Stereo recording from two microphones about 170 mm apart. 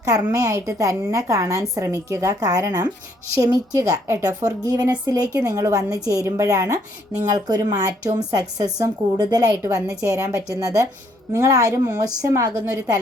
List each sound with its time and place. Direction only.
0.2 s a woman's voice: 15° right (ahead or behind)